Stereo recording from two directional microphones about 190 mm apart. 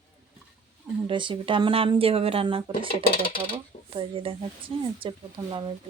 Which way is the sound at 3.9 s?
30° right (ahead or behind).